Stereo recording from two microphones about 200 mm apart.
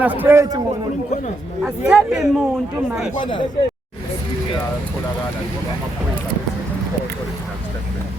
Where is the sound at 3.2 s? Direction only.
25° left (ahead or behind).